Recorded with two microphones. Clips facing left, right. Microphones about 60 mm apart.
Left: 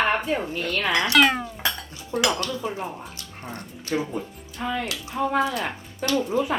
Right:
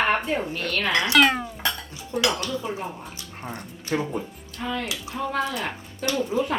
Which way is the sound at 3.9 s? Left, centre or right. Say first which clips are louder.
Even; centre.